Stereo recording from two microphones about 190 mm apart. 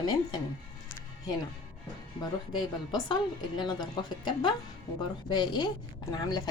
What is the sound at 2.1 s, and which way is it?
A woman's voice, 20° left (ahead or behind).